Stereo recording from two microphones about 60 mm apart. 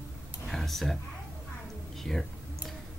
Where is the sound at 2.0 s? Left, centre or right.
Centre.